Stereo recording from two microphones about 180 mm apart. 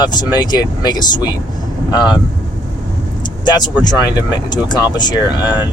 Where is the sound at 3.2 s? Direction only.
25° left (ahead or behind).